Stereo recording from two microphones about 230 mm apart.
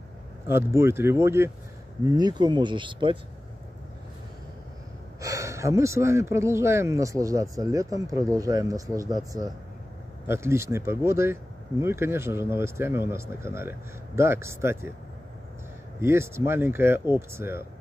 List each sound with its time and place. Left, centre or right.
0.5 s speech: centre
5.2 s speech: centre
16.0 s speech: centre